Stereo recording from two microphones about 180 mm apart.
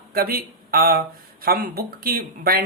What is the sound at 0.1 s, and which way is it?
Speech, 55° right (ahead or behind).